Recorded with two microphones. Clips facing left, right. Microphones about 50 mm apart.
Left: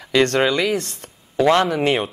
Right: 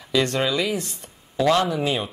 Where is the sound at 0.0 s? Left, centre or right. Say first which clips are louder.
Left 5 dB; left.